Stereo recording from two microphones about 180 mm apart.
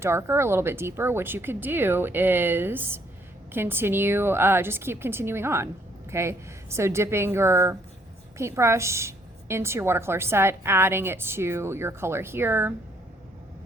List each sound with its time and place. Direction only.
0.0 s a woman's voice: 15° right (ahead or behind)